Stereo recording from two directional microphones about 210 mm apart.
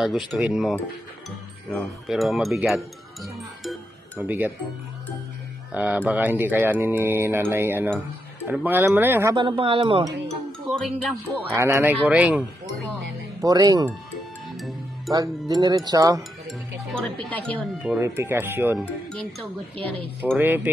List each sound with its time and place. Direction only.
0.0 s speech: centre (ahead or behind)
4.2 s speech: 10° right (ahead or behind)
5.7 s speech: 5° right (ahead or behind); by 10.1 s 20° right (ahead or behind)
10.7 s speech: centre (ahead or behind)
11.5 s speech: 10° right (ahead or behind)
13.4 s speech: 15° right (ahead or behind)
15.0 s speech: 15° right (ahead or behind)
16.4 s speech: 5° left (ahead or behind)
18.0 s speech: 10° right (ahead or behind)
20.3 s speech: 10° right (ahead or behind)